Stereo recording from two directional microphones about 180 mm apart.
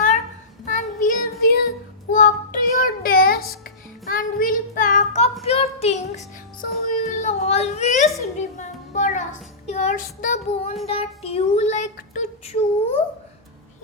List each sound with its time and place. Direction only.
0.6 s child singing: 45° left (ahead or behind); by 1.6 s 60° left (ahead or behind)
2.1 s child singing: 50° left (ahead or behind)
8.4 s a sound: 40° left (ahead or behind)
9.6 s child singing: 40° left (ahead or behind)